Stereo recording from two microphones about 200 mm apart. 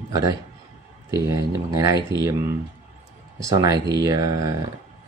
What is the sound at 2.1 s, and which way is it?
Speech, 15° right (ahead or behind).